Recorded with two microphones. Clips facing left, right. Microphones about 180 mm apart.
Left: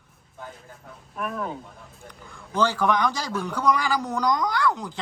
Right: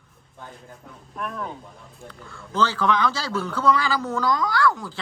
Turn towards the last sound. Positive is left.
turn(degrees=20)  # may be behind; listen again after turning